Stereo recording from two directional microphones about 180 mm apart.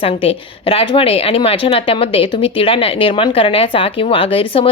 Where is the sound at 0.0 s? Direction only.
30° left (ahead or behind).